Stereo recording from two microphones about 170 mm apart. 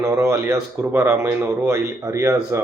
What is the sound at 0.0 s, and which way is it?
Speech, 15° right (ahead or behind).